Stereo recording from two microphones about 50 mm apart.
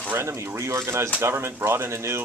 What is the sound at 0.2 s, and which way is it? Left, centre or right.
Speech, right.